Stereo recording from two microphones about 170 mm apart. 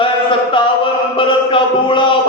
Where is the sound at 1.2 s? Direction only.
30° left (ahead or behind).